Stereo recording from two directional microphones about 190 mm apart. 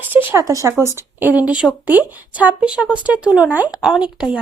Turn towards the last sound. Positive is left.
turn(degrees=-5)  # may be behind; listen again after turning